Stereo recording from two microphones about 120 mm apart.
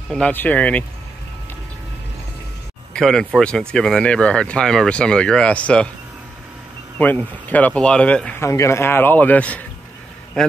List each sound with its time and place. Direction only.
0.3 s speech: 15° left (ahead or behind)
2.9 s speech: 5° left (ahead or behind)
7.0 s speech: 15° left (ahead or behind)
8.4 s speech: 25° left (ahead or behind); by 10.5 s 5° left (ahead or behind)